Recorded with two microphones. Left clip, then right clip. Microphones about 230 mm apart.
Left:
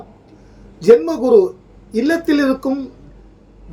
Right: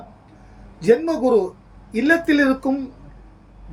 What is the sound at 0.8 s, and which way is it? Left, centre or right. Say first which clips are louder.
A man's voice: left 6 dB; centre.